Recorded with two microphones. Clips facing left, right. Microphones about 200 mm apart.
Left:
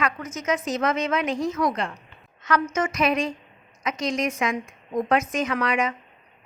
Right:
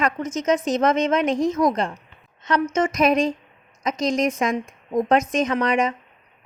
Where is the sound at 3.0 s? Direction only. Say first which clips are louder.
Right 5 dB; 40° right (ahead or behind).